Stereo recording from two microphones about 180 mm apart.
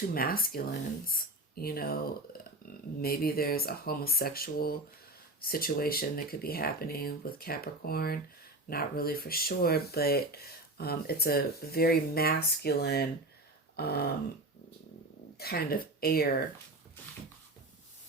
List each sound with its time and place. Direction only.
0.1 s speech: 55° left (ahead or behind)
15.4 s speech: 60° left (ahead or behind)